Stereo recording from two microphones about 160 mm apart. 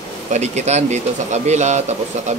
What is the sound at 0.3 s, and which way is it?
Speech, 45° right (ahead or behind).